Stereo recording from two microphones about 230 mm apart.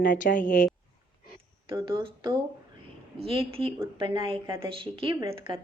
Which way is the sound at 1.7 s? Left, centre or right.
Centre.